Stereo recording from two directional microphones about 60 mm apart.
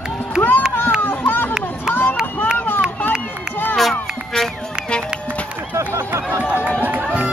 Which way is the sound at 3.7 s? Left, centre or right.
Centre.